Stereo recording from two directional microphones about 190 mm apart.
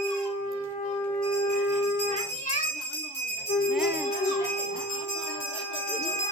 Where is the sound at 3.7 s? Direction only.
5° right (ahead or behind).